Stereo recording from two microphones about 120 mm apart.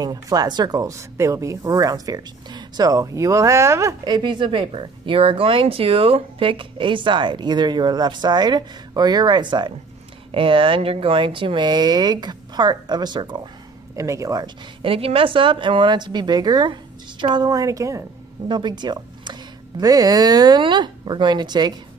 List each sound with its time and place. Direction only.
0.0 s speech: 30° right (ahead or behind)
4.0 s speech: 40° right (ahead or behind)
13.9 s speech: 25° right (ahead or behind)
14.8 s a woman's voice: 50° right (ahead or behind); by 18.0 s 25° right (ahead or behind)
18.5 s speech: 40° right (ahead or behind)